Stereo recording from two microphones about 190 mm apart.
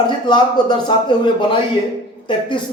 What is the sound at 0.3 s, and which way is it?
A man's voice, 25° left (ahead or behind).